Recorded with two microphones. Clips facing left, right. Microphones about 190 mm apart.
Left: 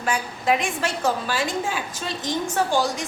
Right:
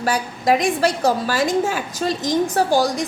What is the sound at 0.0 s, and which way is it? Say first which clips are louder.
A woman's voice: right 4 dB; 40° right (ahead or behind).